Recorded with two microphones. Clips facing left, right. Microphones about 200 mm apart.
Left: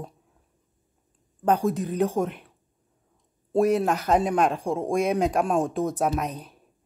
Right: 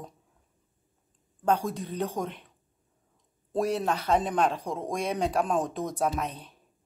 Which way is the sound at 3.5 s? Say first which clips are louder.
Left 6 dB; 10° left (ahead or behind).